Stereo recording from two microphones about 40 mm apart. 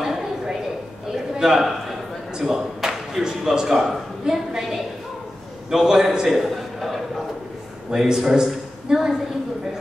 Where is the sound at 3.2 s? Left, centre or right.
Centre.